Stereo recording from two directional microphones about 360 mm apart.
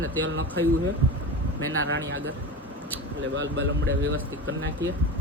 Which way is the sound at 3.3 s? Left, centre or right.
Right.